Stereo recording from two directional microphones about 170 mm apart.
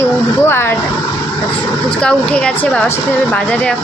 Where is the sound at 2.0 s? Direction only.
5° left (ahead or behind).